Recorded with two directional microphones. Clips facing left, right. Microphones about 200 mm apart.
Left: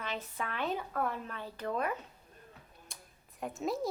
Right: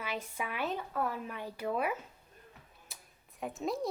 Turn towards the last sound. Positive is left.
turn(degrees=0)  # may be behind; listen again after turning